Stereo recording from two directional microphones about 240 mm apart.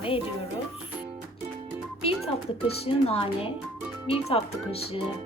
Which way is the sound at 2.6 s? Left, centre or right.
Left.